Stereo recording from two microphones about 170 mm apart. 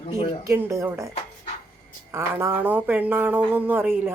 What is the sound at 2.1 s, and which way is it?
Speech, 15° right (ahead or behind).